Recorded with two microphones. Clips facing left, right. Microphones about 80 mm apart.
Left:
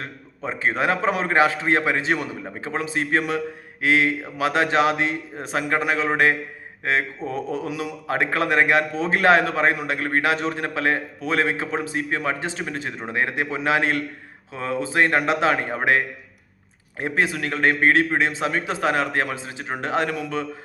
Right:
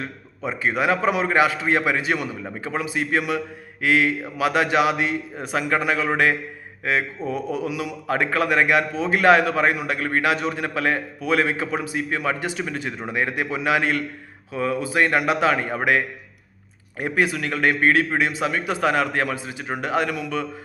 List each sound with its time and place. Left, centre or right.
0.4 s a man's voice: left
17.0 s a man's voice: left